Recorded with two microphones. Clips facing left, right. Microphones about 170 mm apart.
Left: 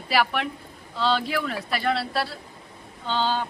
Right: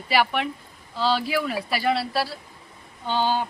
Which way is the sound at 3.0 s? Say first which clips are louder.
Right 2 dB; 15° right (ahead or behind).